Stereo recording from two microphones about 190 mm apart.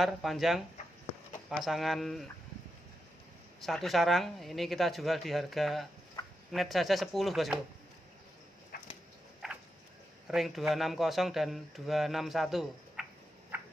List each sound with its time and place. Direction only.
0.0 s speech: centre (ahead or behind)
3.6 s speech: centre (ahead or behind)
8.7 s dog: 50° left (ahead or behind)
10.2 s speech: centre (ahead or behind)